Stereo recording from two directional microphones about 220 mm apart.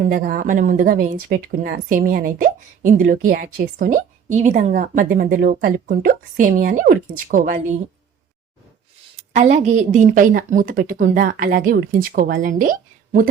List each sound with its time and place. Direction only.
0.0 s speech: 40° right (ahead or behind)
9.3 s speech: 30° right (ahead or behind)